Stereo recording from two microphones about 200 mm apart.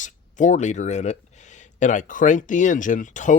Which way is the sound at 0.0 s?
40° left (ahead or behind).